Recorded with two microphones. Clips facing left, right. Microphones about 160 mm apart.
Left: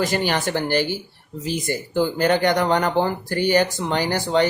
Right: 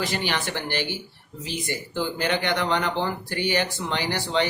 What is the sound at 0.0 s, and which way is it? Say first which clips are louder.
Speech: left 6 dB; 45° left (ahead or behind).